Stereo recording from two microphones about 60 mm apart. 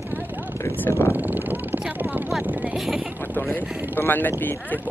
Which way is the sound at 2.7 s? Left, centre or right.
Centre.